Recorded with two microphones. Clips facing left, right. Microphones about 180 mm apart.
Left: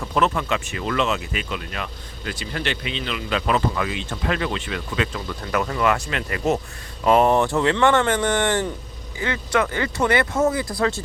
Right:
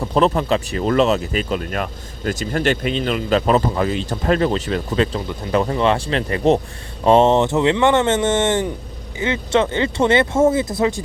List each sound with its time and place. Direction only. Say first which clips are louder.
0.0 s speech: right 5 dB; 35° right (ahead or behind)